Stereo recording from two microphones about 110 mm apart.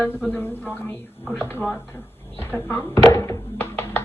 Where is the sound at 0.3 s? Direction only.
20° left (ahead or behind).